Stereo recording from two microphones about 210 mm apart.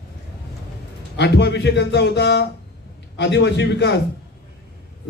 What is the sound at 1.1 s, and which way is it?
A man's voice, 55° left (ahead or behind).